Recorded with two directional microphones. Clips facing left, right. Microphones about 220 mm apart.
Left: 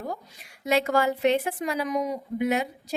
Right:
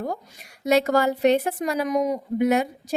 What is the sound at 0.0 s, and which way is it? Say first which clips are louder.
A woman's voice: right 4 dB; 45° right (ahead or behind).